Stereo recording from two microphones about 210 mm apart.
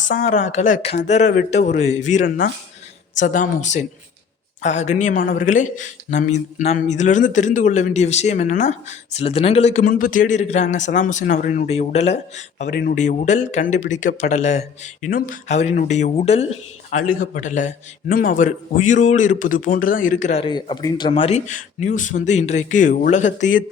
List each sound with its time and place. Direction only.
0.1 s speech: 35° left (ahead or behind)
12.6 s speech: 45° left (ahead or behind)